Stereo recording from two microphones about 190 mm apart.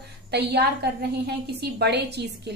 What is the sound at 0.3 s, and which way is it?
Speech, 60° right (ahead or behind).